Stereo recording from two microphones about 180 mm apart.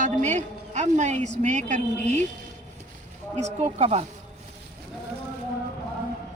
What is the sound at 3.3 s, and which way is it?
Speech, 40° right (ahead or behind).